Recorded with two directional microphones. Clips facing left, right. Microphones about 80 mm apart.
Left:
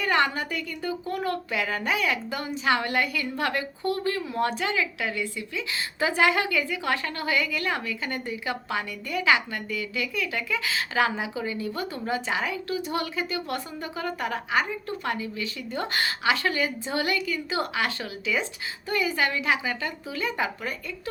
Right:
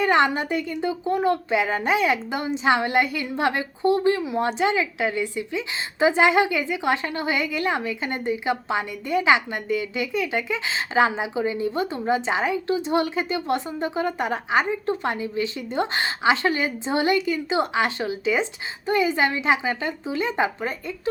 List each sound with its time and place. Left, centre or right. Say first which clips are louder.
0.0 s a woman's voice: right 5 dB; right